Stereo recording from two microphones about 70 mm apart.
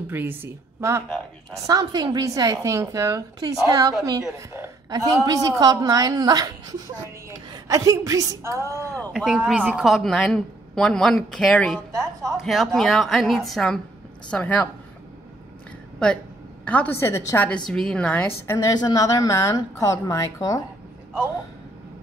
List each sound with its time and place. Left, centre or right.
0.1 s speech: right
1.5 s a woman's voice: right
4.8 s a woman's voice: right
8.5 s speech: right
9.1 s a woman's voice: centre
9.8 s speech: centre
11.9 s a woman's voice: right
12.4 s a woman's voice: centre
14.3 s speech: left
16.0 s a woman's voice: centre
16.9 s a woman's voice: left
17.6 s speech: centre
18.0 s speech: left
18.8 s a woman's voice: left